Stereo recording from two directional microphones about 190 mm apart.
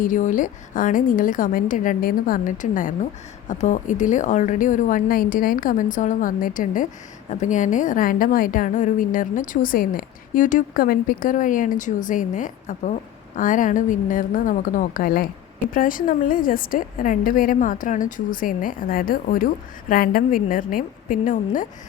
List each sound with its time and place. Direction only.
0.0 s a woman's voice: 45° left (ahead or behind)